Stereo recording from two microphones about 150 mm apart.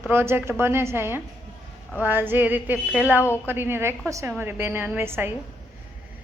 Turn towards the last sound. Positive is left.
turn(degrees=-15)  # may be behind; listen again after turning